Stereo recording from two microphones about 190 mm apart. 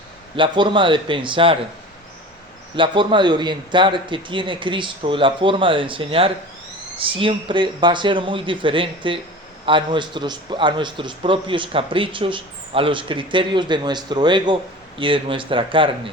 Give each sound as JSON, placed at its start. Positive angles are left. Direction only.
{"t": 0.3, "sound": "a man's voice", "side_deg": -25}
{"t": 2.7, "sound": "a man's voice", "side_deg": -25}